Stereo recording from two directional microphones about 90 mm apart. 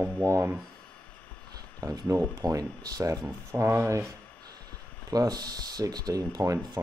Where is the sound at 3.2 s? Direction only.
30° right (ahead or behind).